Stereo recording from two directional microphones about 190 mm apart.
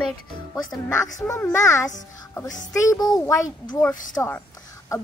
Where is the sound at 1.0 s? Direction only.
15° left (ahead or behind).